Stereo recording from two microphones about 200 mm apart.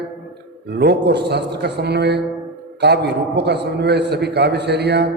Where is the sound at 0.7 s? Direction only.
55° right (ahead or behind).